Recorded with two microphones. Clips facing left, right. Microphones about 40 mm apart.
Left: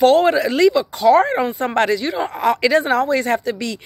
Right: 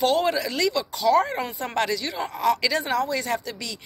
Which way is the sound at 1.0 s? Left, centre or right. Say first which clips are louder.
Left 6 dB; left.